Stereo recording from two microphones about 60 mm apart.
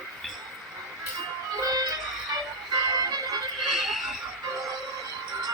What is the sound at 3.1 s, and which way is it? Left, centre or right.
Music, right.